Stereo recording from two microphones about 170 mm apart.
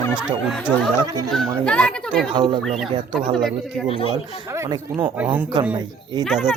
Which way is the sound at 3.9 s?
35° left (ahead or behind).